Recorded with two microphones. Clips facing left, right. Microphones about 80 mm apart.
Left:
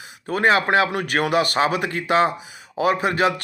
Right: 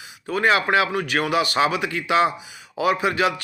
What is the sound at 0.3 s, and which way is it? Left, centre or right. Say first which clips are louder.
Speech: left 1 dB; left.